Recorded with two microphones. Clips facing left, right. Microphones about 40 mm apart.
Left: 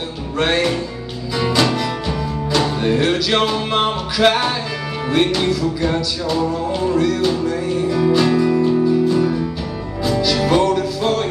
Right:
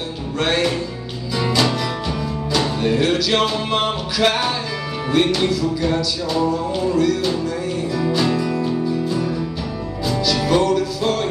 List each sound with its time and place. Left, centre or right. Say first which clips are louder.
0.4 s music: left 2 dB; centre